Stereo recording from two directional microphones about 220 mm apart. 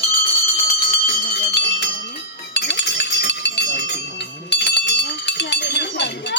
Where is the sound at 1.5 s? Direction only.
55° left (ahead or behind).